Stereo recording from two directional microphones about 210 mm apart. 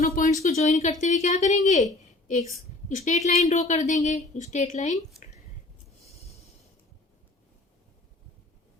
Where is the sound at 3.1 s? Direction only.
35° left (ahead or behind).